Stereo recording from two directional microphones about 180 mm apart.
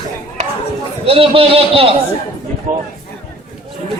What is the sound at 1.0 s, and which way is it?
Speech, 30° right (ahead or behind).